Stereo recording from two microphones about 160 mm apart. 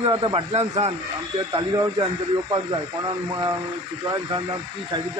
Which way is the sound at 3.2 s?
25° right (ahead or behind).